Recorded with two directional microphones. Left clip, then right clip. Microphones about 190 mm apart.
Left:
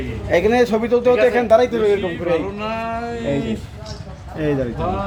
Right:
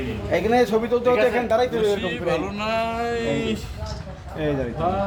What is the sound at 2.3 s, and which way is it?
Speech, 35° right (ahead or behind).